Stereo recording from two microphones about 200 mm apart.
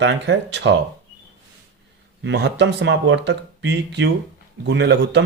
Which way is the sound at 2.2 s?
60° right (ahead or behind).